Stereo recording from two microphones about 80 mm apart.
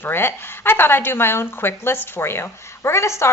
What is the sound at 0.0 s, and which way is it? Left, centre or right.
Speech, left.